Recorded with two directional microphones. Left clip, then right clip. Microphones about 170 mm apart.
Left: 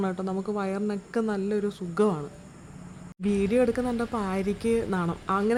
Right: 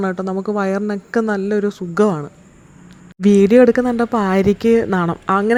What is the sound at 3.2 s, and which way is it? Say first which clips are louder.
Speech: right 14 dB; 50° right (ahead or behind).